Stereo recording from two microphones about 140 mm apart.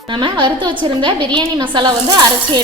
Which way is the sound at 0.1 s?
35° right (ahead or behind).